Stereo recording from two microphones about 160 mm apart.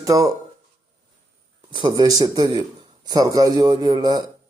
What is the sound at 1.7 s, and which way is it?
Speech, 30° right (ahead or behind).